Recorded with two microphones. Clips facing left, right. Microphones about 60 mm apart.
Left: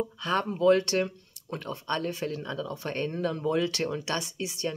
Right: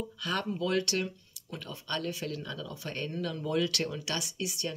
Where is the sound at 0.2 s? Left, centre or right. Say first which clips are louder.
Left 7 dB; left.